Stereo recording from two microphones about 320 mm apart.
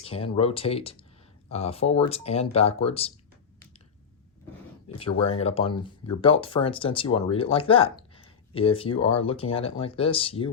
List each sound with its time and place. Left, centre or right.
0.0 s speech: centre
5.4 s speech: centre